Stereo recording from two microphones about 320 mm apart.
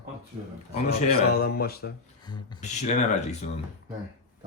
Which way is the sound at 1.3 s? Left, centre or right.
Left.